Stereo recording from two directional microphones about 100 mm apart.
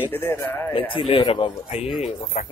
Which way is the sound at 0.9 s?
60° left (ahead or behind).